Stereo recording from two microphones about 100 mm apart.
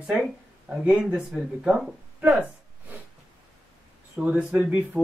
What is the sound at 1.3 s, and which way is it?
Speech, centre (ahead or behind).